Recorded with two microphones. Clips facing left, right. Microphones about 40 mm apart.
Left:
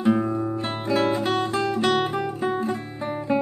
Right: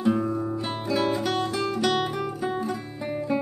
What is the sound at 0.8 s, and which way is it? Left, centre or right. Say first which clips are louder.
Music: left 3 dB; left.